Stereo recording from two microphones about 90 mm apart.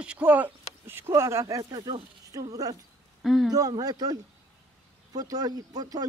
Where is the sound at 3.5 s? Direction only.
45° right (ahead or behind).